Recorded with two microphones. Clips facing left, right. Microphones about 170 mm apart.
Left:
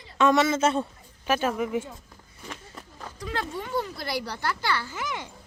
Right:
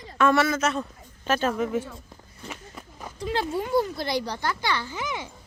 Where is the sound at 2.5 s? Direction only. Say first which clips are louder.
Right 1 dB; 10° right (ahead or behind).